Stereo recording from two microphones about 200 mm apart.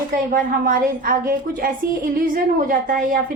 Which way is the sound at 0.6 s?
45° right (ahead or behind).